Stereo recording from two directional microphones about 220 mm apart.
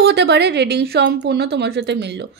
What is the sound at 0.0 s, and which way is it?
Speech, 50° right (ahead or behind).